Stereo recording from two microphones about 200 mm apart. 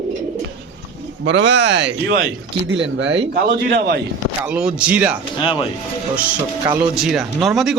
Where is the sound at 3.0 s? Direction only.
65° right (ahead or behind).